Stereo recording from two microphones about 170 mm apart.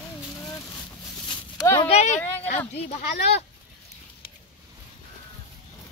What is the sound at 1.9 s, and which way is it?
Speech, 40° left (ahead or behind).